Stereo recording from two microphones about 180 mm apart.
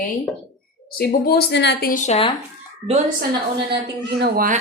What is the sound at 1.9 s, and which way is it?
Speech, 40° left (ahead or behind).